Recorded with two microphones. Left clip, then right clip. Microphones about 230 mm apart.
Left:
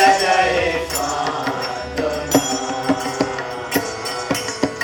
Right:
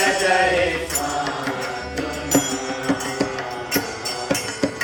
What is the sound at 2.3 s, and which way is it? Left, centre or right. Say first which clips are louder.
Music: left 2 dB; left.